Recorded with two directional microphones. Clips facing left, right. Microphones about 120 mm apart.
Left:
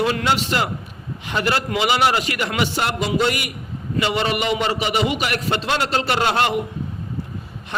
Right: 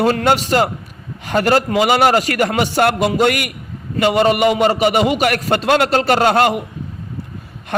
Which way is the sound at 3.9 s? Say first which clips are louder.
Right 7 dB; 45° right (ahead or behind).